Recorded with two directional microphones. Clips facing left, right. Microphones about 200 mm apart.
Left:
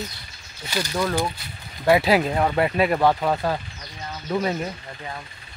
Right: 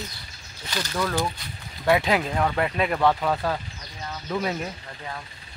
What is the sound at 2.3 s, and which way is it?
Speech, 20° left (ahead or behind).